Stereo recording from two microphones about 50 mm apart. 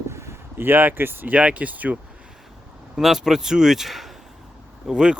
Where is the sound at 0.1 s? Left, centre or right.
Right.